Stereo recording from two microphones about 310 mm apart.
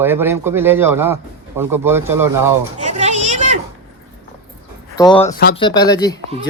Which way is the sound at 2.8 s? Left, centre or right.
Right.